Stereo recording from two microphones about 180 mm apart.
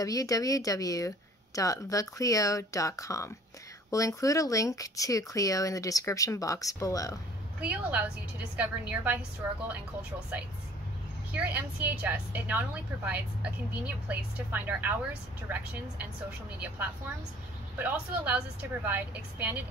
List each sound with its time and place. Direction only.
0.0 s speech: 20° left (ahead or behind)
7.6 s a woman's voice: 10° right (ahead or behind)
11.3 s a woman's voice: 10° right (ahead or behind)